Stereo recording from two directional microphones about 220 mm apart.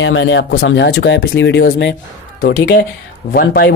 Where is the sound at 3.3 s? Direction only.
45° left (ahead or behind).